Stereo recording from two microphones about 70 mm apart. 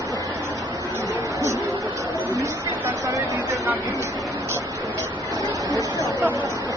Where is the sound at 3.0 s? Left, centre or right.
Right.